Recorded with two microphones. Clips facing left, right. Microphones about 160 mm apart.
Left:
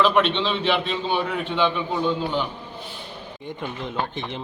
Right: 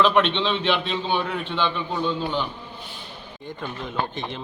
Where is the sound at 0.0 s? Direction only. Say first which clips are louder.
Even; 5° left (ahead or behind).